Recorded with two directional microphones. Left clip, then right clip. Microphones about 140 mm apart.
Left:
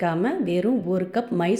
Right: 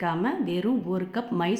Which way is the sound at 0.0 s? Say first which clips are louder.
Left 3 dB; 25° left (ahead or behind).